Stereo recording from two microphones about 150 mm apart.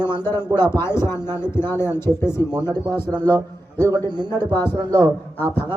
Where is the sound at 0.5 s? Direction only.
15° left (ahead or behind).